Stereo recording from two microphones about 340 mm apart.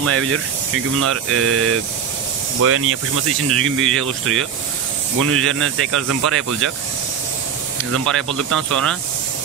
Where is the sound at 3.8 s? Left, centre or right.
Centre.